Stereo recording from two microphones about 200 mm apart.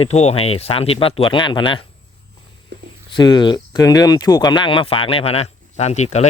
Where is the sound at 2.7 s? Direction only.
55° right (ahead or behind).